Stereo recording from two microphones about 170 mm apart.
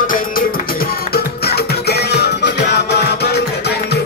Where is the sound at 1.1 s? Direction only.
65° left (ahead or behind).